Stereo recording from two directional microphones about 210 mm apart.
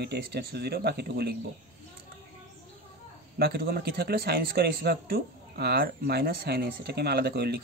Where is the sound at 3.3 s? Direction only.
50° right (ahead or behind).